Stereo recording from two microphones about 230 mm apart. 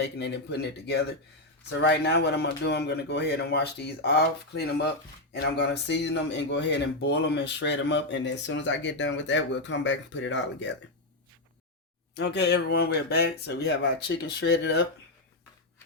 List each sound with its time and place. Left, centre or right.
0.0 s speech: left
12.1 s speech: left